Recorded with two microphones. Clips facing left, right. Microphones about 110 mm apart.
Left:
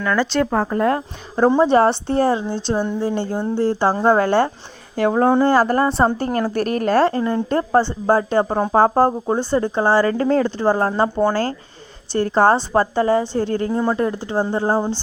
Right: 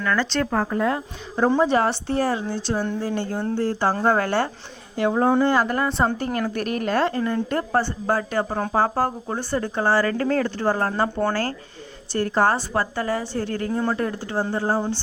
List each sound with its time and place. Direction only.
0.0 s speech: 15° left (ahead or behind)
0.7 s speech: 50° left (ahead or behind)
1.5 s a woman's voice: 30° left (ahead or behind)
4.9 s speech: 50° left (ahead or behind)
5.3 s a woman's voice: 40° left (ahead or behind)